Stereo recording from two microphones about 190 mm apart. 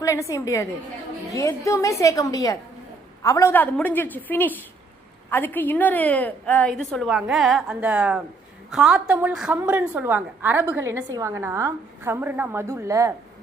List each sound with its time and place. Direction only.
0.0 s a woman's voice: 15° left (ahead or behind); by 13.1 s 15° right (ahead or behind)